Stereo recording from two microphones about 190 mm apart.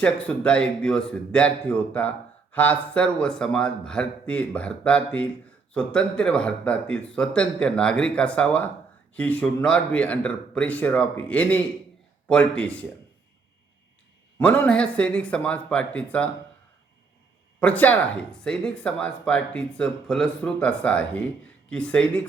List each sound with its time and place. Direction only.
0.0 s speech: 5° left (ahead or behind)
14.3 s speech: 5° left (ahead or behind)
17.6 s speech: 5° left (ahead or behind)